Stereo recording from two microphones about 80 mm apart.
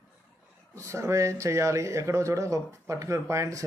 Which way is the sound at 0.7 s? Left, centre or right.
Right.